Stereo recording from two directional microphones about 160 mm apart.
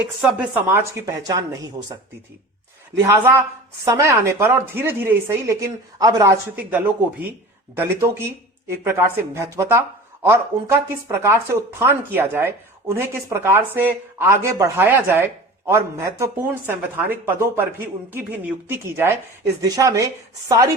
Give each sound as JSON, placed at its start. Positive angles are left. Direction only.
{"t": 0.0, "sound": "speech", "side_deg": -10}
{"t": 3.0, "sound": "speech", "side_deg": -15}
{"t": 6.6, "sound": "speech", "side_deg": -10}